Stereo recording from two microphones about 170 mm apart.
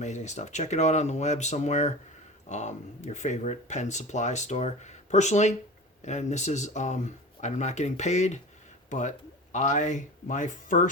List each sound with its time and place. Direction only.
0.0 s speech: 45° left (ahead or behind)